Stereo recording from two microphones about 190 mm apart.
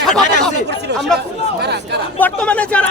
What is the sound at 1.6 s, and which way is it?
Speech, 60° right (ahead or behind).